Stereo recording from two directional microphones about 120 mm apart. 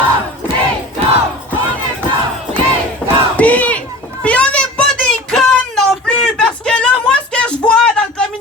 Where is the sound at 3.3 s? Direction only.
10° left (ahead or behind).